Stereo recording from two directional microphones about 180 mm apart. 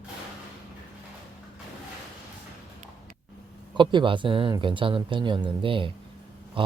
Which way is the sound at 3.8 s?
25° right (ahead or behind).